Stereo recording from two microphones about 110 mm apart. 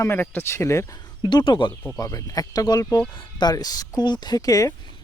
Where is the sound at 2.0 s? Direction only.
35° left (ahead or behind).